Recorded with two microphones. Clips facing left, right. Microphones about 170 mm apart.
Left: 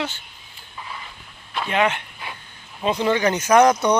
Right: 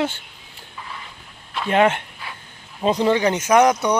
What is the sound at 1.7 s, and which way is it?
Speech, 50° right (ahead or behind).